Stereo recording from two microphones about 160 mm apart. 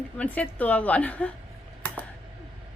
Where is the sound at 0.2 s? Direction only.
10° left (ahead or behind).